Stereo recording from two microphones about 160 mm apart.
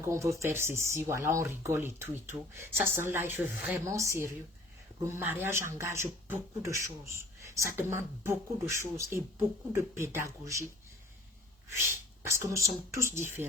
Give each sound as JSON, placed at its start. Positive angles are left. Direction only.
{"t": 0.0, "sound": "speech", "side_deg": -20}
{"t": 11.7, "sound": "speech", "side_deg": -15}